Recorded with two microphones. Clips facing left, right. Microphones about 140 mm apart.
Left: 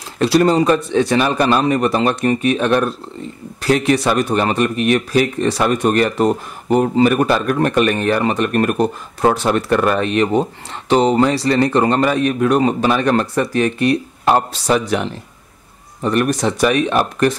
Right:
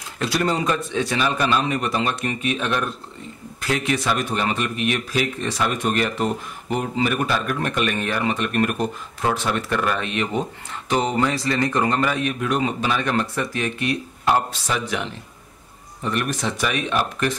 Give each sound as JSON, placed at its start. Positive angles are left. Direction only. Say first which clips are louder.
{"t": 0.2, "sound": "a man's voice", "louder": "left 9 dB", "side_deg": 35}
{"t": 1.2, "sound": "a man's voice", "louder": "left 6 dB", "side_deg": 45}
{"t": 14.2, "sound": "speech", "louder": "left 4 dB", "side_deg": 55}
{"t": 16.0, "sound": "speech", "louder": "left 8 dB", "side_deg": 45}